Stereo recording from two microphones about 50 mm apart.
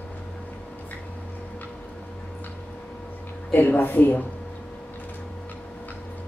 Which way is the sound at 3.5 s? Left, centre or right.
Left.